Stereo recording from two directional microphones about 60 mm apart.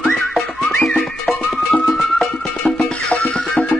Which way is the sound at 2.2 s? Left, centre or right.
Centre.